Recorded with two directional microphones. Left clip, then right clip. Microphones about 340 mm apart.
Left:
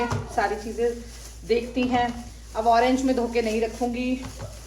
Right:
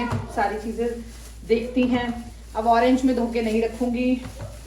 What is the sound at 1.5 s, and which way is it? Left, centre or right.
Speech, centre.